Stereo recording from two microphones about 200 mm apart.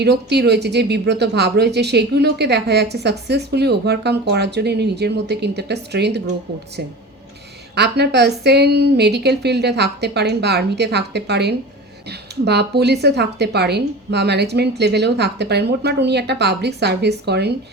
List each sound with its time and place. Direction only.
0.0 s speech: 55° right (ahead or behind)
7.8 s speech: 55° right (ahead or behind)